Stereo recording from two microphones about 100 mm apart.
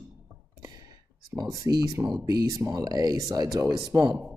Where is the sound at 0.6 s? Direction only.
40° right (ahead or behind).